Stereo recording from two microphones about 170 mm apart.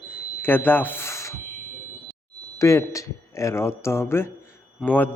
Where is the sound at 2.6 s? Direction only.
15° left (ahead or behind).